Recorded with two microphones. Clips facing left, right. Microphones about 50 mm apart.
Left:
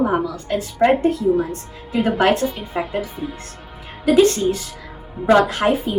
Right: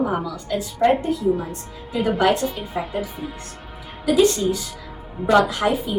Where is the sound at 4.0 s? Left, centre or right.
Left.